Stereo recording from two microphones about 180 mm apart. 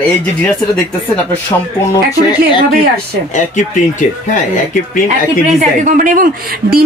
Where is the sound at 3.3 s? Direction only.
45° left (ahead or behind).